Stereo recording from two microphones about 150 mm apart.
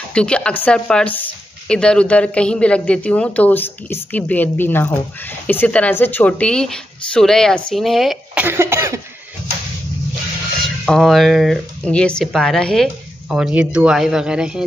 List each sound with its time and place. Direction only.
0.1 s a man's voice: 5° left (ahead or behind)
8.5 s cough: 15° right (ahead or behind)
10.6 s speech: centre (ahead or behind)